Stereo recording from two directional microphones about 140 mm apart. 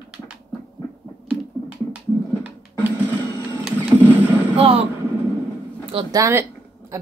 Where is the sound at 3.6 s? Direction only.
15° right (ahead or behind).